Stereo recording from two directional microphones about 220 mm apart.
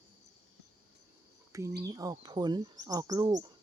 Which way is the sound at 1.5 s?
15° right (ahead or behind).